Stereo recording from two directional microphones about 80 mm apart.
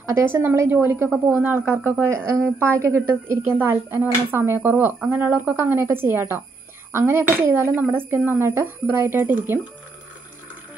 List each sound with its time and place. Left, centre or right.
0.2 s speech: right